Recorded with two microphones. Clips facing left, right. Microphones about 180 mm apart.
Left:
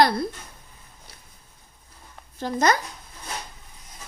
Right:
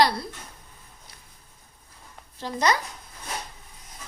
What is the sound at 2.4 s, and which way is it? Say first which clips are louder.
Speech: left 3 dB; 50° left (ahead or behind).